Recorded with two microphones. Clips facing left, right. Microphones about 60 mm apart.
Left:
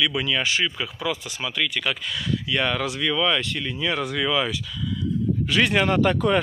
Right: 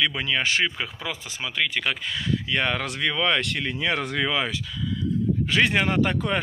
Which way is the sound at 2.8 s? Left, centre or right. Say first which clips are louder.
Left 2 dB; right.